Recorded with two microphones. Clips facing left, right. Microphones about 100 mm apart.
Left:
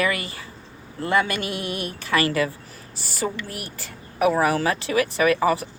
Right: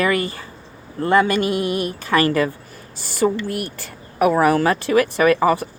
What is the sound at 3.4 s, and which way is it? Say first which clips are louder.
Speech: right 9 dB; 50° right (ahead or behind).